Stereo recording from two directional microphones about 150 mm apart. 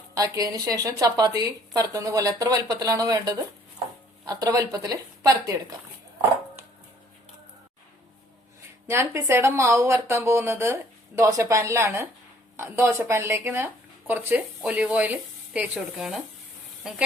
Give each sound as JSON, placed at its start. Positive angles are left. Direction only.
{"t": 0.1, "sound": "speech", "side_deg": -25}
{"t": 8.9, "sound": "a woman's voice", "side_deg": -20}